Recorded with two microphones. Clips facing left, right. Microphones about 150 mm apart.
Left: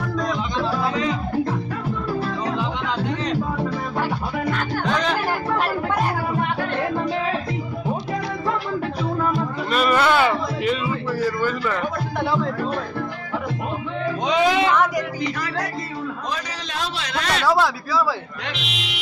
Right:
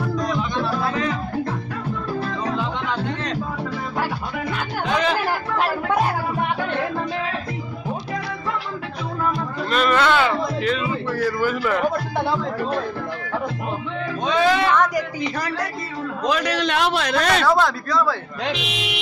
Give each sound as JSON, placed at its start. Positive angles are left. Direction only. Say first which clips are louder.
{"t": 0.6, "sound": "music", "louder": "left 3 dB", "side_deg": 15}
{"t": 2.4, "sound": "music", "louder": "even", "side_deg": 15}
{"t": 4.5, "sound": "music", "louder": "left 1 dB", "side_deg": -5}
{"t": 9.3, "sound": "music", "louder": "left 1 dB", "side_deg": 5}
{"t": 11.3, "sound": "a man's voice", "louder": "right 2 dB", "side_deg": -5}
{"t": 14.2, "sound": "music", "louder": "even", "side_deg": 15}
{"t": 16.3, "sound": "a sound", "louder": "right 9 dB", "side_deg": -75}
{"t": 17.5, "sound": "speech", "louder": "right 1 dB", "side_deg": 5}